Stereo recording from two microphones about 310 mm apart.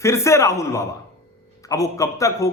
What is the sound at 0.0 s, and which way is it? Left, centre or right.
A man's voice, centre.